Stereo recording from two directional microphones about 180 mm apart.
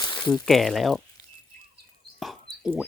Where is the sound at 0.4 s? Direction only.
Centre (ahead or behind).